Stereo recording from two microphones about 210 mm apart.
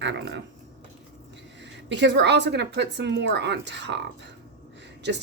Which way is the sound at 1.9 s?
55° right (ahead or behind).